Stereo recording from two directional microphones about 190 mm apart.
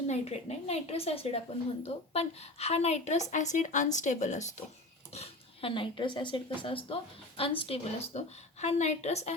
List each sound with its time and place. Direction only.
0.1 s a woman's voice: 35° left (ahead or behind)